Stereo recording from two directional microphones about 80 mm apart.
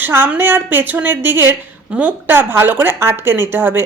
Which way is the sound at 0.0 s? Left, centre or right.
Right.